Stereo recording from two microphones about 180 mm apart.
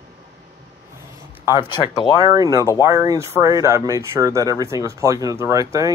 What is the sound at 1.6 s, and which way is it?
Speech, 25° left (ahead or behind).